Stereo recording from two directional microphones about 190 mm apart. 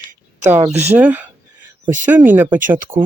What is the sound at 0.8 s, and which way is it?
Speech, 10° right (ahead or behind).